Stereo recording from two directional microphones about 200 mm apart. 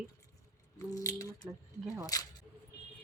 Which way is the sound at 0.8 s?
15° left (ahead or behind).